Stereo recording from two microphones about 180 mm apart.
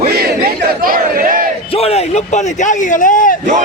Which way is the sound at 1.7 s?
35° left (ahead or behind).